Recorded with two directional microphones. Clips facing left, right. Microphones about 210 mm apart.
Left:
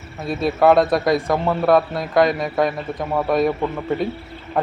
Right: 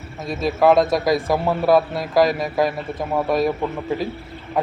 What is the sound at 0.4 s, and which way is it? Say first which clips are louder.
A man's voice: left 1 dB; centre (ahead or behind).